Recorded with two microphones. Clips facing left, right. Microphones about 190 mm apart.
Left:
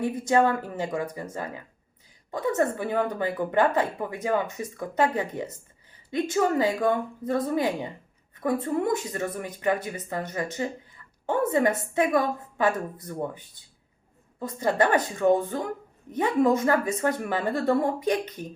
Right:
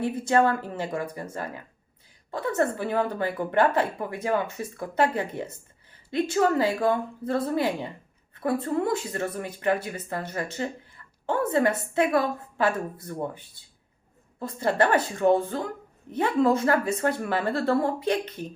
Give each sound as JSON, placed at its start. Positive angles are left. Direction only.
{"t": 0.0, "sound": "speech", "side_deg": 15}
{"t": 14.6, "sound": "speech", "side_deg": 15}